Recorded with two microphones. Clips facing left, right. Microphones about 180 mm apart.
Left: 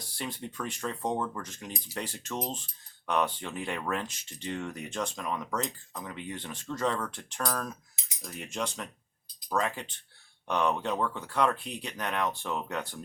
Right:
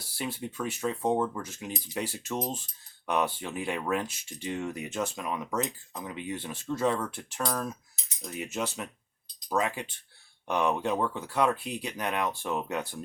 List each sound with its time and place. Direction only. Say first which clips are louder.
0.0 s speech: right 3 dB; 5° right (ahead or behind)